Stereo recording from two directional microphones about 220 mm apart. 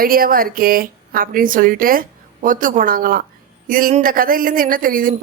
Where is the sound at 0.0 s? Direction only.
40° right (ahead or behind).